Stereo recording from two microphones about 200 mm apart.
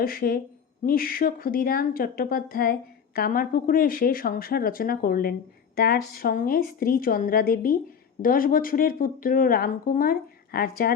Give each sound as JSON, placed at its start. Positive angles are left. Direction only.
{"t": 0.0, "sound": "speech", "side_deg": 45}